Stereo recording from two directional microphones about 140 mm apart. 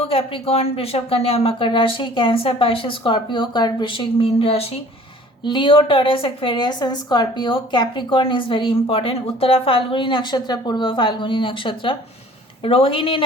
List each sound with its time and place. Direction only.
0.1 s a woman's voice: 40° left (ahead or behind)
5.4 s a woman's voice: 35° left (ahead or behind)